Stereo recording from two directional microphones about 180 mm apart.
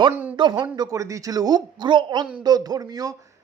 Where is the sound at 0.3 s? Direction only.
25° right (ahead or behind).